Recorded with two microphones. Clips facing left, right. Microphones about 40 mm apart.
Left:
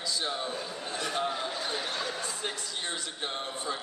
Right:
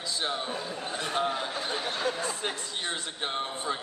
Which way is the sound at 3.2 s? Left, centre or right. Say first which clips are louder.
Right 4 dB; right.